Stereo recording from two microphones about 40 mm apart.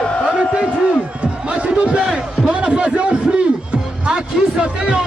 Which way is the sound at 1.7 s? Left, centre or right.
Right.